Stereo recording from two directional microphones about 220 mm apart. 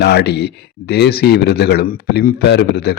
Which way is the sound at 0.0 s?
50° left (ahead or behind).